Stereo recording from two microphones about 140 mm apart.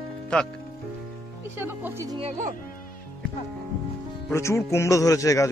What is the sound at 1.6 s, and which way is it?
Speech, 15° right (ahead or behind).